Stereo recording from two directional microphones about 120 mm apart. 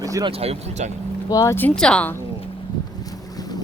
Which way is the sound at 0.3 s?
60° right (ahead or behind).